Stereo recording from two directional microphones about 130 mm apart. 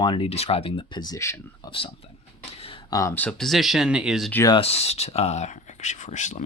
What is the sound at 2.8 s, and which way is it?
Speech, 30° left (ahead or behind).